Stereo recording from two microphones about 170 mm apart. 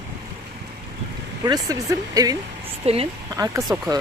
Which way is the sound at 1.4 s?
20° right (ahead or behind).